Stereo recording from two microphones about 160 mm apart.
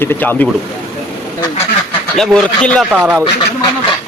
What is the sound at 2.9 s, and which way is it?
Speech, 10° right (ahead or behind).